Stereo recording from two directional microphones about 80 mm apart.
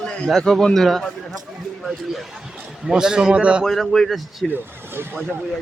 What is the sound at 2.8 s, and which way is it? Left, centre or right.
Speech, centre.